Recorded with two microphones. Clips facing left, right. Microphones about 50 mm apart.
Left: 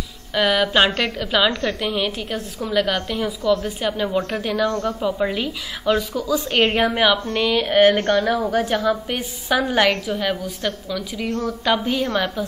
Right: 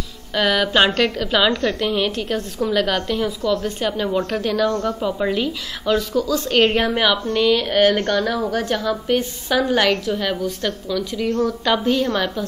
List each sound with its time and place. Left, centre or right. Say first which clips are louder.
0.3 s a woman's voice: even; centre